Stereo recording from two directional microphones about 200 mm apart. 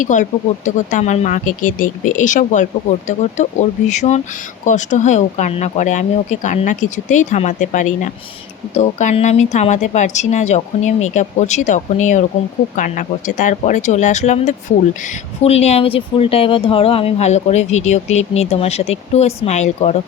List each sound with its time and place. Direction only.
0.0 s speech: 40° left (ahead or behind)